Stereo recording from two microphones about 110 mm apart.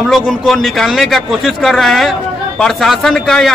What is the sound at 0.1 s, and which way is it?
A man's voice, centre (ahead or behind).